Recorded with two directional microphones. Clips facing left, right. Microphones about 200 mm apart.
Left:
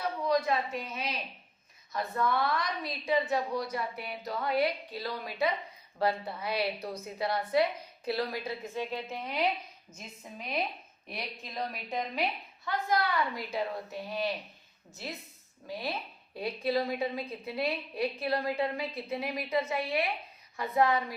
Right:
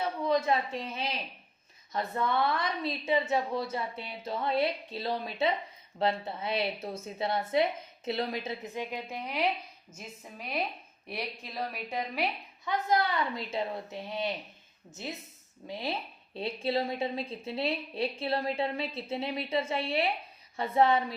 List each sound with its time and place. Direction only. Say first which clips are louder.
0.3 s a woman's voice: right 1 dB; 25° right (ahead or behind); by 12.2 s 5° right (ahead or behind)
12.6 s a woman's voice: right 2 dB; 20° right (ahead or behind)
15.6 s a woman's voice: right 1 dB; 20° right (ahead or behind)